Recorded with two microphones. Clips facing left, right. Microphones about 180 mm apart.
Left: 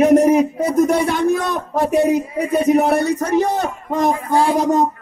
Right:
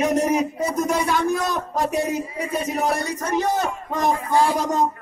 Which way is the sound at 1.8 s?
55° left (ahead or behind).